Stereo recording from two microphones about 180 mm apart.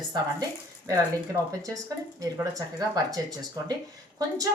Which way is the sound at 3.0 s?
20° right (ahead or behind).